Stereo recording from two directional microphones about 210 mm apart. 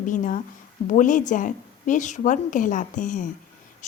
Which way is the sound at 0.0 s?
40° left (ahead or behind).